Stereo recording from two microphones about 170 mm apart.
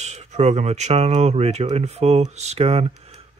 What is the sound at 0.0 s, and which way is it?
Speech, 40° right (ahead or behind).